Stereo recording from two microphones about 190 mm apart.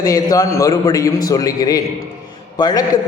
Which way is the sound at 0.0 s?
20° left (ahead or behind).